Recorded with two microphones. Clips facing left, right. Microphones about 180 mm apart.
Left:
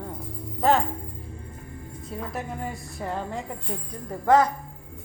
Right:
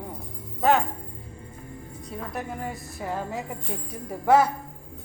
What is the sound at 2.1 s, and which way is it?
A woman's voice, centre (ahead or behind).